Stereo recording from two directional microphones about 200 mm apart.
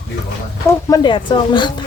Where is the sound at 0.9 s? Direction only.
20° left (ahead or behind).